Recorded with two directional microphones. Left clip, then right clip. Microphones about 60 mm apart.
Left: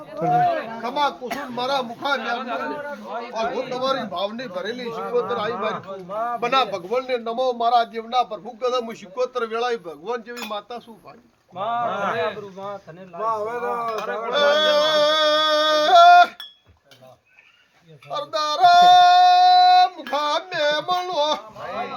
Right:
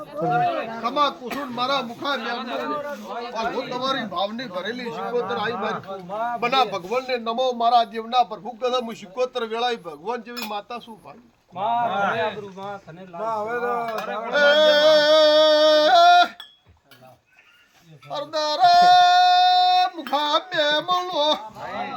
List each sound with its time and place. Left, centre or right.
0.8 s speech: left
1.5 s speech: left
2.0 s a man's voice: centre
2.8 s a man's voice: right
3.3 s a man's voice: centre
3.7 s a man's voice: centre
11.5 s a man's voice: centre
11.9 s a man's voice: centre
12.2 s speech: centre
18.1 s a sound: left